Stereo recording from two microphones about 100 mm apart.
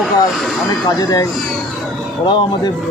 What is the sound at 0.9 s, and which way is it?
Speech, 40° left (ahead or behind).